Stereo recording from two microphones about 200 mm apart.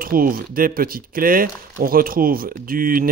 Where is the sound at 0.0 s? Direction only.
45° right (ahead or behind).